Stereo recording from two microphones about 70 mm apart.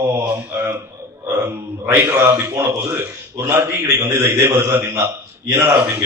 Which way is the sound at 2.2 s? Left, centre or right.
Right.